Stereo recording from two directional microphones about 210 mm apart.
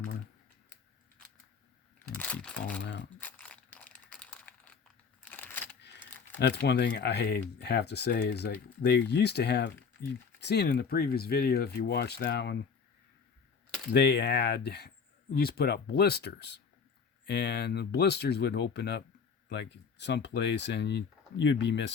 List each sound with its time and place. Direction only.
2.0 s mechanisms: 5° left (ahead or behind)
2.8 s crumpling: 55° left (ahead or behind)
3.2 s crumpling: 5° left (ahead or behind)
5.2 s a sound: 10° left (ahead or behind)
6.4 s speech: 55° left (ahead or behind)
13.9 s speech: 50° left (ahead or behind)